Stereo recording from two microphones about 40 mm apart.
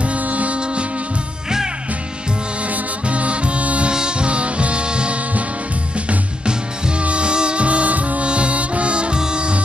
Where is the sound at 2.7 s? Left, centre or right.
Right.